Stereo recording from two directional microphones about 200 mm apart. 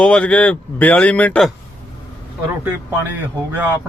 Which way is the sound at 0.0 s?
5° left (ahead or behind).